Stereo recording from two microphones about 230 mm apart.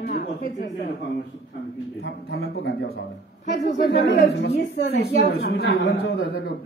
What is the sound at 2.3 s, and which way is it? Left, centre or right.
A woman's voice, left.